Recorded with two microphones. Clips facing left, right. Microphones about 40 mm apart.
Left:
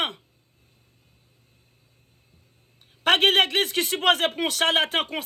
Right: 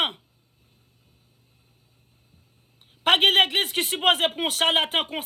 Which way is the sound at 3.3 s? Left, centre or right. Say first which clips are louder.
Even; right.